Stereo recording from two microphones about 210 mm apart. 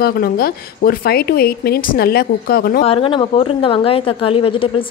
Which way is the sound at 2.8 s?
25° left (ahead or behind).